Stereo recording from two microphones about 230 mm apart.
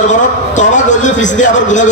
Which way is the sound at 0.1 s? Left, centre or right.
Left.